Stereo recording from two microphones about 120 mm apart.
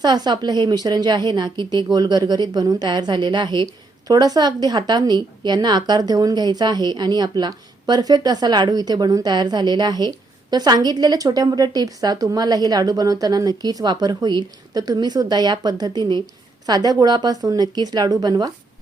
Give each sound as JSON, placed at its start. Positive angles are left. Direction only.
{"t": 0.0, "sound": "a woman's voice", "side_deg": -35}